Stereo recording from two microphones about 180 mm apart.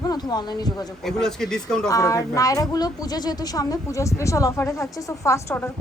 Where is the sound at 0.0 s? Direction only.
20° left (ahead or behind).